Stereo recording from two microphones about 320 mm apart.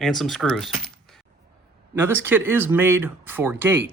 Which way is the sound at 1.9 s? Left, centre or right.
Centre.